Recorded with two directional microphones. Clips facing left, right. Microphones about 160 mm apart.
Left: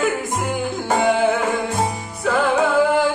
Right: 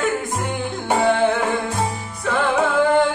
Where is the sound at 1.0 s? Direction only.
5° left (ahead or behind).